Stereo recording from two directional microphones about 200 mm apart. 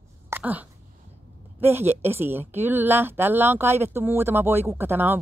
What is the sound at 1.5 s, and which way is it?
A woman's voice, 10° right (ahead or behind).